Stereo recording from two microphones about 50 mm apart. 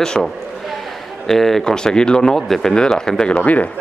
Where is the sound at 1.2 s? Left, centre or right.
Centre.